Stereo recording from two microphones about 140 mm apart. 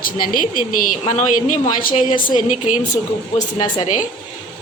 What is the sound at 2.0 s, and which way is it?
Speech, 35° left (ahead or behind).